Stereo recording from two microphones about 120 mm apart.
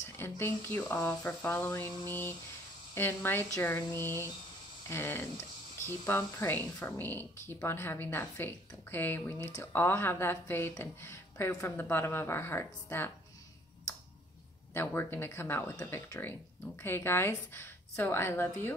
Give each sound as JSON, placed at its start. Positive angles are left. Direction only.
{"t": 0.2, "sound": "a woman's voice", "side_deg": 20}
{"t": 14.7, "sound": "a woman's voice", "side_deg": 20}